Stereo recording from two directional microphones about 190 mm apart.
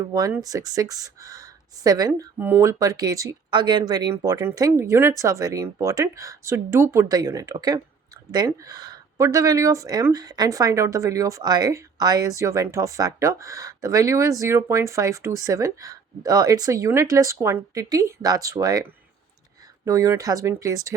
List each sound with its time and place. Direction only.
0.1 s speech: 20° right (ahead or behind)